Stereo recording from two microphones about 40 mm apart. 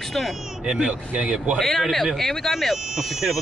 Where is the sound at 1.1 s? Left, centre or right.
Right.